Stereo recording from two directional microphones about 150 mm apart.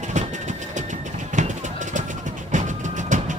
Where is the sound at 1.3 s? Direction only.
55° right (ahead or behind).